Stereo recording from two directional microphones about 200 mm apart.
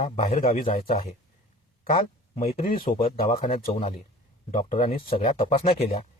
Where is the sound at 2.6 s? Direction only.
45° left (ahead or behind).